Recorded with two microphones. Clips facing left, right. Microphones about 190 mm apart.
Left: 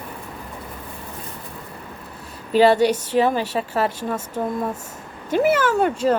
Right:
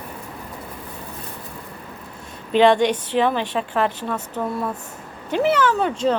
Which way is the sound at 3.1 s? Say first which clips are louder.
Left 1 dB; 40° left (ahead or behind).